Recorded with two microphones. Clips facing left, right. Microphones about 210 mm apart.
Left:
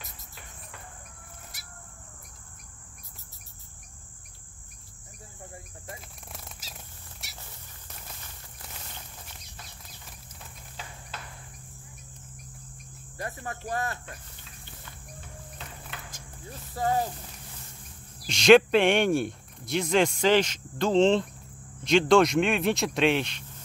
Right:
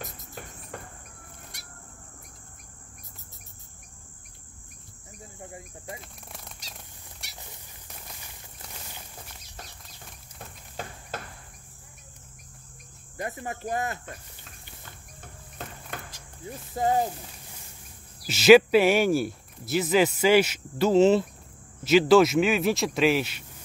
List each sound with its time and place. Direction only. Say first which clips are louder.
0.0 s cricket: right 9 dB; 45° right (ahead or behind)
1.5 s bird: right 3 dB; 5° left (ahead or behind)
5.9 s a sound: right 2 dB; centre (ahead or behind)
7.2 s cat: even; centre (ahead or behind)
10.8 s a sound: right 7 dB; 50° right (ahead or behind)
13.2 s speech: right 3 dB; 20° right (ahead or behind)
15.1 s music: right 4 dB; 50° right (ahead or behind)
16.7 s speech: right 3 dB; 20° right (ahead or behind)
18.2 s speech: right 2 dB; 5° right (ahead or behind)